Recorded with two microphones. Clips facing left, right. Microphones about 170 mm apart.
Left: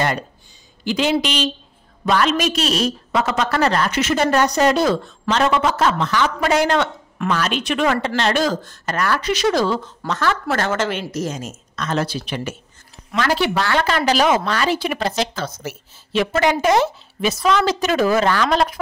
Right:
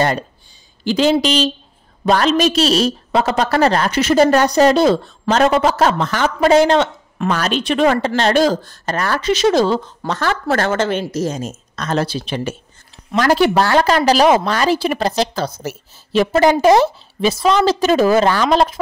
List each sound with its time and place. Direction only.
0.8 s a woman's voice: 35° right (ahead or behind)
6.5 s speech: 25° right (ahead or behind)
7.2 s a woman's voice: 40° right (ahead or behind)
13.1 s a woman's voice: 45° right (ahead or behind)